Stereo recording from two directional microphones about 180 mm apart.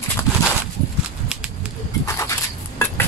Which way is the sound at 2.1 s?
15° left (ahead or behind).